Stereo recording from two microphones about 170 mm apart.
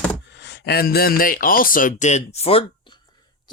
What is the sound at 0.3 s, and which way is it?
Speech, 90° left.